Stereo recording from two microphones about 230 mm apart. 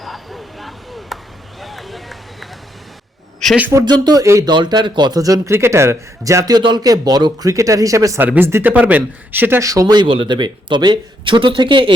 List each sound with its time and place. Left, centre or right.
0.0 s vehicle: centre
1.1 s chop: centre
1.6 s run: centre
3.4 s speech: centre; by 11.9 s right